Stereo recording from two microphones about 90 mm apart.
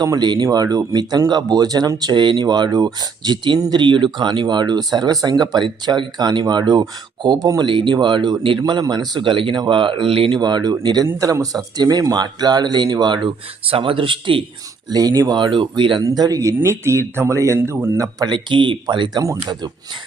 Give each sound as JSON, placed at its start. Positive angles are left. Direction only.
{"t": 0.0, "sound": "speech", "side_deg": -50}
{"t": 7.7, "sound": "speech", "side_deg": -65}
{"t": 10.3, "sound": "speech", "side_deg": -50}
{"t": 14.8, "sound": "speech", "side_deg": -45}
{"t": 15.4, "sound": "speech", "side_deg": -60}
{"t": 16.0, "sound": "speech", "side_deg": -45}
{"t": 18.3, "sound": "speech", "side_deg": -60}
{"t": 19.2, "sound": "speech", "side_deg": -35}